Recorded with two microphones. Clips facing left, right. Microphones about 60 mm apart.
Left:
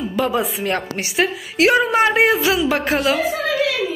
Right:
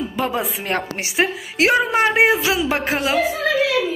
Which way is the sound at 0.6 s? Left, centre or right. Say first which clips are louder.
Left 1 dB; right.